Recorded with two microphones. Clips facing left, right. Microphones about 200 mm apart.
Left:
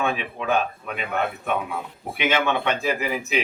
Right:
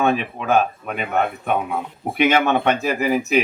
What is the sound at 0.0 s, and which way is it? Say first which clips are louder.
Speech: right 5 dB; 45° right (ahead or behind).